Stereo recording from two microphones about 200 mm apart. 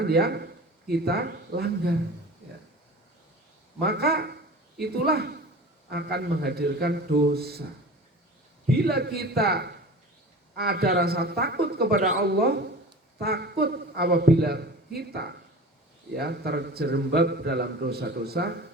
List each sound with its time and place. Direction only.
0.0 s a man's voice: 55° right (ahead or behind)
3.8 s a man's voice: 55° right (ahead or behind)